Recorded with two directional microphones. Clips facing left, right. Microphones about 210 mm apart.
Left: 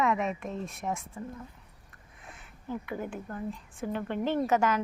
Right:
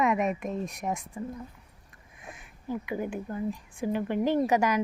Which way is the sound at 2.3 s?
15° right (ahead or behind).